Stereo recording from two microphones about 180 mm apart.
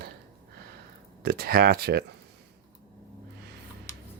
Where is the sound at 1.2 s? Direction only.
55° right (ahead or behind).